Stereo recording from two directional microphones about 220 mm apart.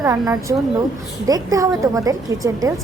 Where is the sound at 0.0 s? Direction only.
15° right (ahead or behind).